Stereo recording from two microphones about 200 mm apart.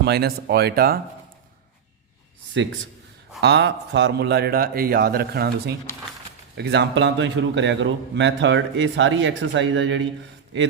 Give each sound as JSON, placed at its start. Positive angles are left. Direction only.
{"t": 0.0, "sound": "a man's voice", "side_deg": -55}
{"t": 3.4, "sound": "a man's voice", "side_deg": -60}